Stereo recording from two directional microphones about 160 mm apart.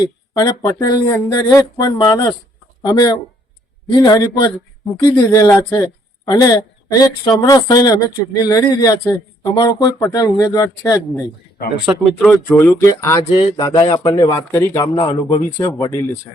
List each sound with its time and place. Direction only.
0.0 s speech: 25° left (ahead or behind)
12.2 s speech: 10° left (ahead or behind)
14.9 s speech: 30° left (ahead or behind)